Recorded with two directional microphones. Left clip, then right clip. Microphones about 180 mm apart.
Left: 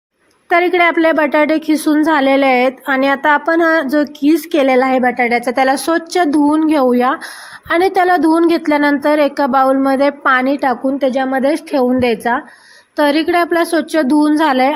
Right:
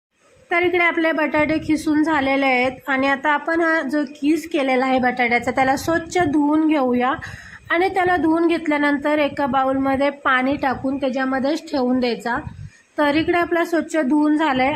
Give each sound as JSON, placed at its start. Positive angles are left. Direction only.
{"t": 0.5, "sound": "a woman's voice", "side_deg": 25}